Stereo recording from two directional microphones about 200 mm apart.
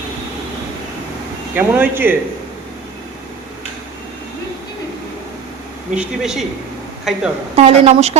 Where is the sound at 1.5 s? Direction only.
10° right (ahead or behind).